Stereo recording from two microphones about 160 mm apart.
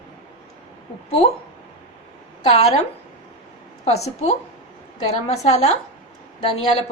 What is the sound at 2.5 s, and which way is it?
Speech, 40° left (ahead or behind).